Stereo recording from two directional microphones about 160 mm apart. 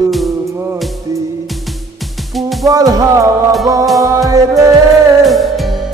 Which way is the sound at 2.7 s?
20° right (ahead or behind).